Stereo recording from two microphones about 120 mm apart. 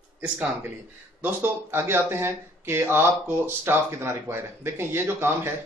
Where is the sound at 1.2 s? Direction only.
20° right (ahead or behind).